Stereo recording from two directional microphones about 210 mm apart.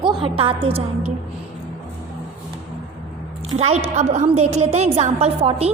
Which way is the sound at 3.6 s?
30° right (ahead or behind).